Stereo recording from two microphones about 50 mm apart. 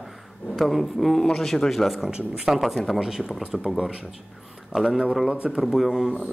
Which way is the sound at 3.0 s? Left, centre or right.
Centre.